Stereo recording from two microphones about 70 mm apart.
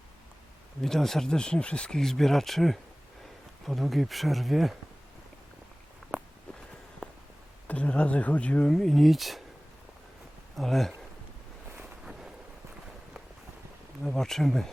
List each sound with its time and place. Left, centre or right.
0.8 s speech: centre
7.7 s speech: centre
8.7 s speech: centre
10.6 s speech: centre
14.0 s speech: centre